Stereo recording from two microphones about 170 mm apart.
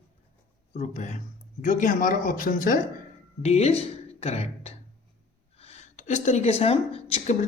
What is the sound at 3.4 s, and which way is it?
Speech, 40° left (ahead or behind).